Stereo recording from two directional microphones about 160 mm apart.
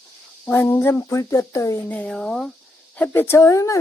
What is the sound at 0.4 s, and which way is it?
Speech, 15° left (ahead or behind).